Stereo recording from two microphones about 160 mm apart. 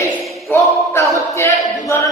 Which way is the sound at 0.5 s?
20° left (ahead or behind).